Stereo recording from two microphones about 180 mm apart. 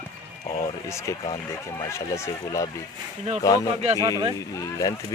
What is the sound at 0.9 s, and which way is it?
A child's voice, 15° left (ahead or behind).